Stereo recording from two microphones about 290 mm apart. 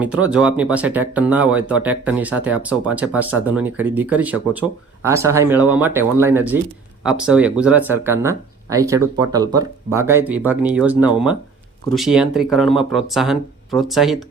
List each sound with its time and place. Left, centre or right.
0.0 s speech: centre